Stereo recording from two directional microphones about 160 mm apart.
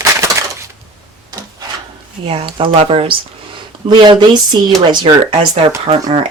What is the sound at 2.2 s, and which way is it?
Speech, 35° right (ahead or behind).